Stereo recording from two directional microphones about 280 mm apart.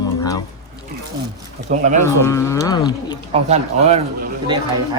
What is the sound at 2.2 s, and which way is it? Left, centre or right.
Wild animals, centre.